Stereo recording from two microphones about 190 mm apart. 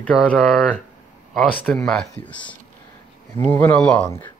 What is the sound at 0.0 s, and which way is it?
Speech, 5° left (ahead or behind).